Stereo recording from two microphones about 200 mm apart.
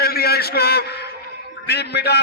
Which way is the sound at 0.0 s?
50° left (ahead or behind).